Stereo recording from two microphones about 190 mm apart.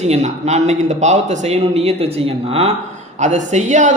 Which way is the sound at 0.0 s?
35° right (ahead or behind).